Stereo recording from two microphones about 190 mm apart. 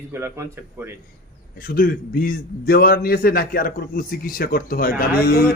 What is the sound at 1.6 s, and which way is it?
A man's voice, 50° left (ahead or behind).